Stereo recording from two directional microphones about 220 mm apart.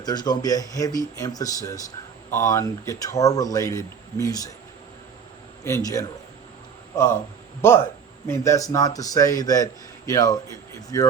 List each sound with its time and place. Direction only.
0.0 s speech: 20° left (ahead or behind)
5.6 s speech: 15° left (ahead or behind)
8.3 s speech: 15° left (ahead or behind)